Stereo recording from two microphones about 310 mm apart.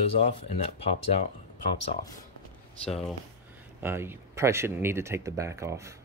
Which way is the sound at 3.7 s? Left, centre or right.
Centre.